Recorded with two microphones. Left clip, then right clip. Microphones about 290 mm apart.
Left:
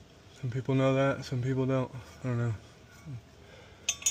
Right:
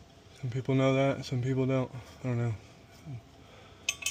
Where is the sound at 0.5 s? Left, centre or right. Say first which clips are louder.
Even; centre.